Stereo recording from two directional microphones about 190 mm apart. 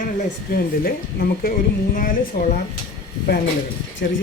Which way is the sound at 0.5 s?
55° left (ahead or behind).